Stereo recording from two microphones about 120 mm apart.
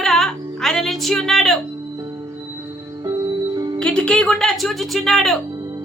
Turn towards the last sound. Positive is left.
turn(degrees=0)  # may be behind; listen again after turning